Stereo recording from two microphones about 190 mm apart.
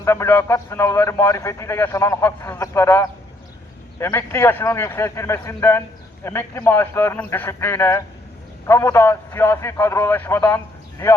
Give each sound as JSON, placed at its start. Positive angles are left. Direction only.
{"t": 0.0, "sound": "a man's voice", "side_deg": 15}